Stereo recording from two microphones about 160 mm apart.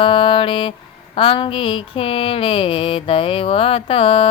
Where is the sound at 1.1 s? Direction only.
35° left (ahead or behind).